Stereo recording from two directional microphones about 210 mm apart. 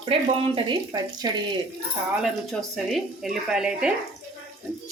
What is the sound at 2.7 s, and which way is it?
Speech, centre (ahead or behind).